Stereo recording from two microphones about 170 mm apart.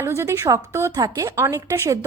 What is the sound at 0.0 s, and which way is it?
A woman's voice, 15° right (ahead or behind).